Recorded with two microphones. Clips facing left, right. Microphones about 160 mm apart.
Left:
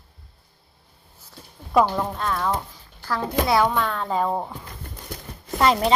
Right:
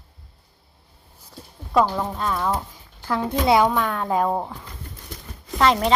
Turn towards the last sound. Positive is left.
turn(degrees=0)  # may be behind; listen again after turning